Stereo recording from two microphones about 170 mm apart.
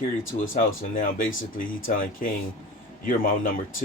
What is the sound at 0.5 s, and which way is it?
Speech, 55° left (ahead or behind).